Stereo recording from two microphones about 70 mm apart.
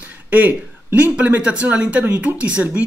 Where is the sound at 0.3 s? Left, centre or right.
Right.